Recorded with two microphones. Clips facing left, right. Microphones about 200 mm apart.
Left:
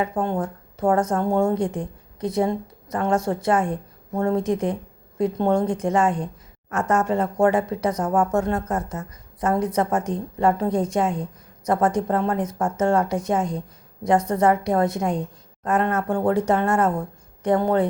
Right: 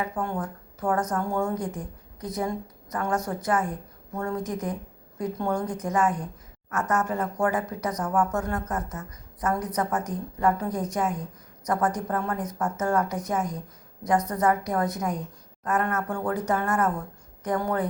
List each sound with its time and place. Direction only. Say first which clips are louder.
0.2 s speech: left 6 dB; 25° left (ahead or behind)